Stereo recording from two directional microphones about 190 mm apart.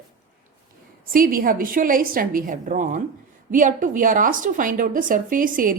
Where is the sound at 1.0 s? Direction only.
50° right (ahead or behind).